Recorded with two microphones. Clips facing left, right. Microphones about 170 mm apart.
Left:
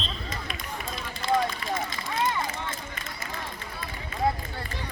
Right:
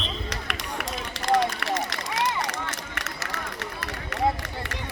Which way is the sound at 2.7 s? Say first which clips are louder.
Right 2 dB; 80° right.